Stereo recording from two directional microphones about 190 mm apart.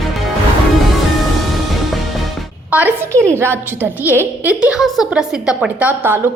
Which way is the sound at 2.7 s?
10° right (ahead or behind).